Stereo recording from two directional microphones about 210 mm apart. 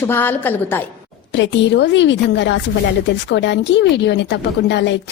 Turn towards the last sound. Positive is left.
turn(degrees=55)  # may be behind; listen again after turning